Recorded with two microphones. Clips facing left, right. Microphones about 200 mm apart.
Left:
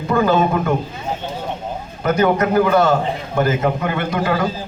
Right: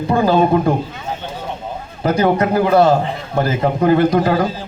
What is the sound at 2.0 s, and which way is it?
Speech, 30° right (ahead or behind).